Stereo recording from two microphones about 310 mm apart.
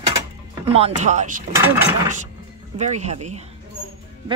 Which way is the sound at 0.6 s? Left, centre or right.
Centre.